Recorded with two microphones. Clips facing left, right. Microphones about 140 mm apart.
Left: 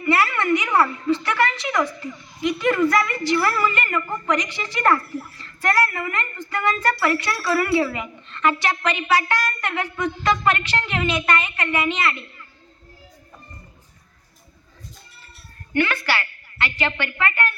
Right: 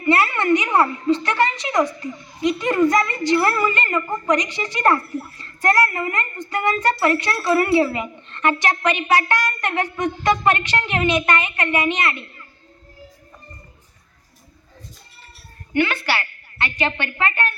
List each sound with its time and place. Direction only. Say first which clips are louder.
0.0 s a sound: right 2 dB; 20° right (ahead or behind)
8.8 s a woman's voice: right 2 dB; 20° right (ahead or behind)
15.7 s a woman's voice: right 1 dB; 20° right (ahead or behind)